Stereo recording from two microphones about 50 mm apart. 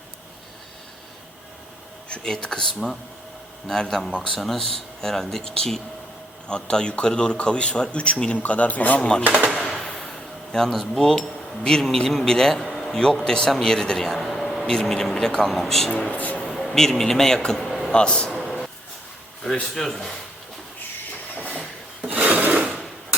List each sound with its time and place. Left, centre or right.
2.2 s a man's voice: centre; by 9.0 s left
9.0 s speech: centre
9.6 s a sound: centre
11.6 s speech: centre
12.6 s a sound: centre
13.2 s speech: centre
16.1 s speech: left
16.4 s a man's voice: centre
17.7 s a sound: centre
17.9 s a man's voice: centre
18.3 s a sound: centre
19.7 s speech: centre
22.1 s filing: right